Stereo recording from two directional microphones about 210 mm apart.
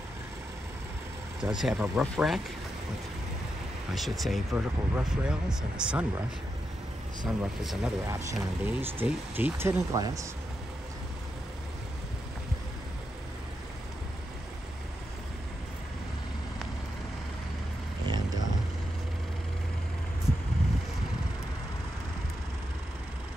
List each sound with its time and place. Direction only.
1.4 s speech: 5° right (ahead or behind)
4.2 s speech: centre (ahead or behind)
7.2 s speech: centre (ahead or behind)
8.1 s speech: 10° right (ahead or behind)
18.0 s a sound: 20° right (ahead or behind)